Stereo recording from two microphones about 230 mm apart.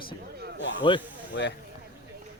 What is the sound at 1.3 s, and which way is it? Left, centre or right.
Speech, left.